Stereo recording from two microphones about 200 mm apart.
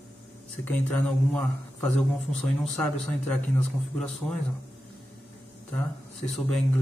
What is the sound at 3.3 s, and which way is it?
Speech, 5° left (ahead or behind).